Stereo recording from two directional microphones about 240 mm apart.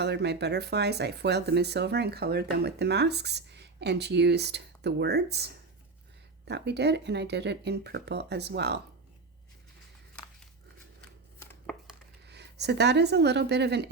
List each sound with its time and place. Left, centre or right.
0.0 s speech: right
6.5 s speech: right
11.3 s chopping: centre
12.3 s speech: right